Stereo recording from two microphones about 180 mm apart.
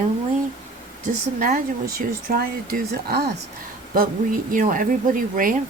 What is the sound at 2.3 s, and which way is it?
Speech, 60° right (ahead or behind).